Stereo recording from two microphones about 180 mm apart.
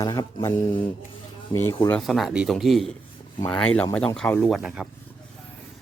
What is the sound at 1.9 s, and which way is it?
Speech, centre (ahead or behind).